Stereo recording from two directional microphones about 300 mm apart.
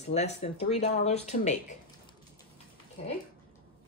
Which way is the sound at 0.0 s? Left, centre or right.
Left.